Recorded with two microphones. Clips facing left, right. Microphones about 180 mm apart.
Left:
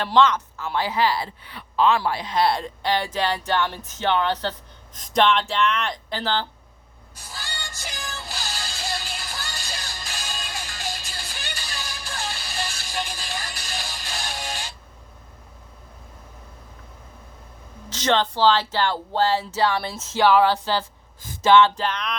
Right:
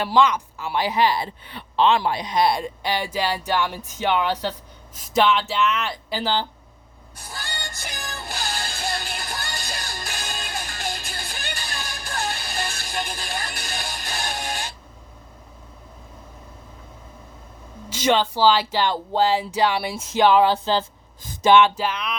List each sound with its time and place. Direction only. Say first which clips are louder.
0.0 s speech: even; 10° right (ahead or behind)
7.2 s music: right 3 dB; 55° right (ahead or behind)
17.8 s speech: right 2 dB; 10° right (ahead or behind)